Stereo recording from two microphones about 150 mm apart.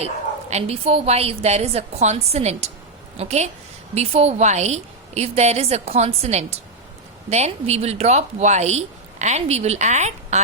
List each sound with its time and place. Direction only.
0.5 s a woman's voice: 40° right (ahead or behind)